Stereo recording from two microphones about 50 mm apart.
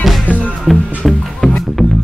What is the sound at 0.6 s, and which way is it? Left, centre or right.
Music, centre.